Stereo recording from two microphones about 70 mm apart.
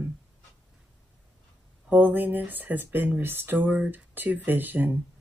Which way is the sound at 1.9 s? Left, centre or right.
Right.